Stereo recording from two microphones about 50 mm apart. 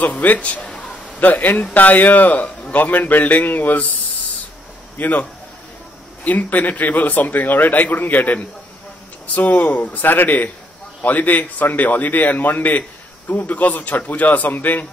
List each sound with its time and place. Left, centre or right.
0.0 s a man's voice: left
0.7 s a sound: centre
1.2 s a man's voice: left
4.9 s a man's voice: left
6.2 s a man's voice: left